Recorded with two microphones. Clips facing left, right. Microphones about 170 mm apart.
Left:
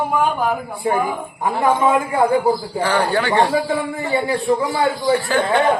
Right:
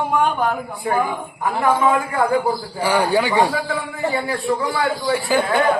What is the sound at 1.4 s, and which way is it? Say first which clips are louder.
Speech: left 1 dB; 25° left (ahead or behind).